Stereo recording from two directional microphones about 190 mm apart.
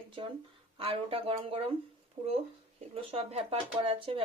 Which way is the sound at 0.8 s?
30° right (ahead or behind).